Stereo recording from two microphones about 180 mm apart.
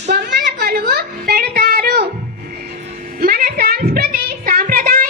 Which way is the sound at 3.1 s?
55° right (ahead or behind).